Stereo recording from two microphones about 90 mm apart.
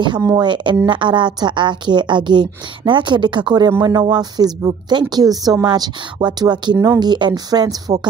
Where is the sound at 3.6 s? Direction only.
40° right (ahead or behind).